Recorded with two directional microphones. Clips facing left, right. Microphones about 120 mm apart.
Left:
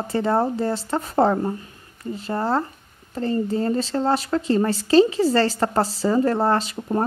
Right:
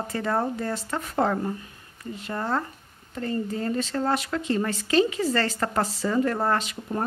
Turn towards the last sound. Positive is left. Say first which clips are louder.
# left 5 dB
turn(degrees=35)  # may be behind; listen again after turning